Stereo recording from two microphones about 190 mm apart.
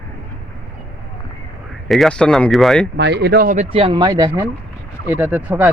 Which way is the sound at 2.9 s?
60° right (ahead or behind).